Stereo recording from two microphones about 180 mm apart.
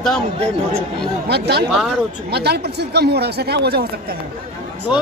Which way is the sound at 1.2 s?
65° right (ahead or behind).